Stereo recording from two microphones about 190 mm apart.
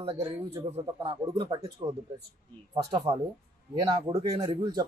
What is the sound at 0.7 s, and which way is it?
Speech, 30° right (ahead or behind).